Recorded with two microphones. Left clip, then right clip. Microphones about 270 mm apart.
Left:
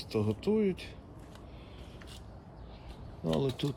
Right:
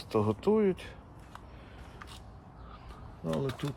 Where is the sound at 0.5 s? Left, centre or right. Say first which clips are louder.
Right 3 dB; right.